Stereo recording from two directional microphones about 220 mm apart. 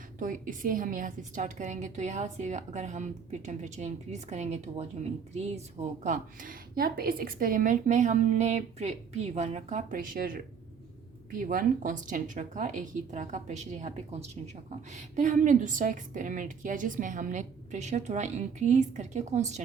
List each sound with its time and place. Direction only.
0.2 s a woman's voice: 35° right (ahead or behind)